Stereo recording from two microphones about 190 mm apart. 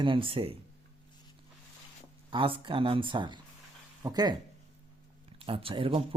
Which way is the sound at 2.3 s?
25° right (ahead or behind).